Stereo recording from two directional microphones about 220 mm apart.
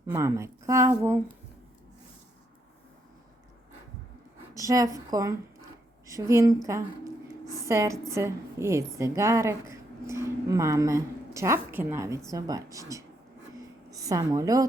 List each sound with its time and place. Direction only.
0.1 s a woman's voice: 15° right (ahead or behind)
4.5 s a woman's voice: 15° right (ahead or behind)